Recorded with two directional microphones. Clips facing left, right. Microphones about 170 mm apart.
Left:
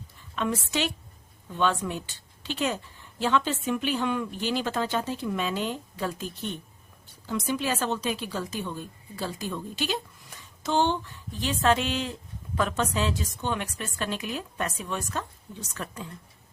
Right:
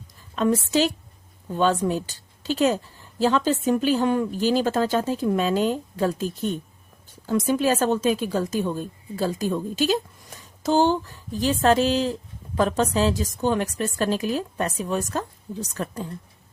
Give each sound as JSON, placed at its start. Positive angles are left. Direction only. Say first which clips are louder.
{"t": 0.3, "sound": "a woman's voice", "louder": "right 8 dB", "side_deg": -40}